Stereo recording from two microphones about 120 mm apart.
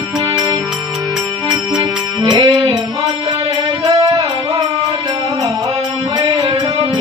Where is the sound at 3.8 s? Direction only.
35° right (ahead or behind).